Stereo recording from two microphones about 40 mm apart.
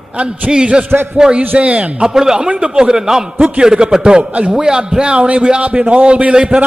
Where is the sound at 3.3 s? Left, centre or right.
Right.